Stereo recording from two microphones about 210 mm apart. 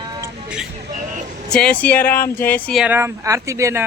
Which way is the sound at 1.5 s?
5° left (ahead or behind).